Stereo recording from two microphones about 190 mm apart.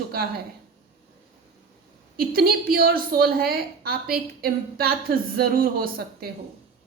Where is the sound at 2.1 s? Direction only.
50° right (ahead or behind).